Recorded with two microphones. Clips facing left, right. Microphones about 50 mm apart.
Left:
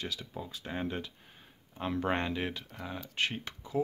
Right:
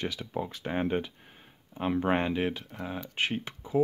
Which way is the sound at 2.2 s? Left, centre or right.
Centre.